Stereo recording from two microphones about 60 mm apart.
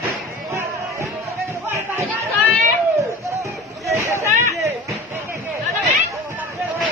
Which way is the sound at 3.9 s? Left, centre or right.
Right.